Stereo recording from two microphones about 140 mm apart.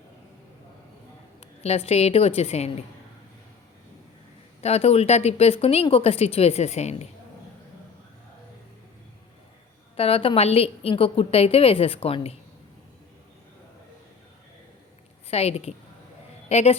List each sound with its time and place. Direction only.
1.4 s a woman's voice: 45° left (ahead or behind)
4.6 s speech: 45° left (ahead or behind)
10.0 s speech: 40° left (ahead or behind)
15.3 s a woman's voice: 45° left (ahead or behind)